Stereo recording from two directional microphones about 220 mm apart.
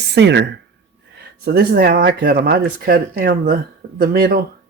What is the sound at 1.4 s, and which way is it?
Speech, 45° right (ahead or behind).